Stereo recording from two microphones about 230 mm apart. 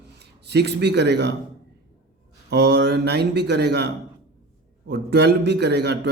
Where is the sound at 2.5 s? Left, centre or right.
Right.